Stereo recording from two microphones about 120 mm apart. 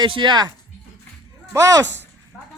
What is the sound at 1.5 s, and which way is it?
Speech, 25° right (ahead or behind).